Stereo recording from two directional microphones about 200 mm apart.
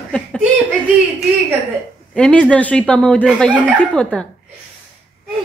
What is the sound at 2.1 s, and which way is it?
Speech, 5° left (ahead or behind).